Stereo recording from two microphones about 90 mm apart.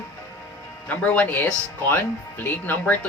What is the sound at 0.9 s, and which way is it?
Speech, 15° left (ahead or behind).